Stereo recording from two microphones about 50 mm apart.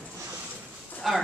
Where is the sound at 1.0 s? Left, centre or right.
Centre.